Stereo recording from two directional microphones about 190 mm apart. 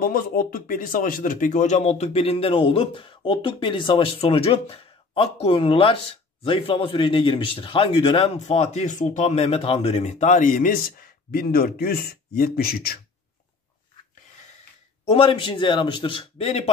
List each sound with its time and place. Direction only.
0.0 s speech: 50° left (ahead or behind)
15.0 s speech: 30° left (ahead or behind)